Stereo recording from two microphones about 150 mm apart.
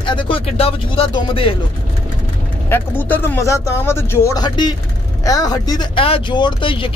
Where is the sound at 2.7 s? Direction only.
15° left (ahead or behind).